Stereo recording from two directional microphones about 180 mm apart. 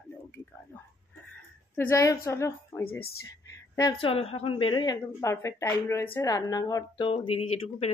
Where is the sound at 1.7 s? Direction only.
10° left (ahead or behind).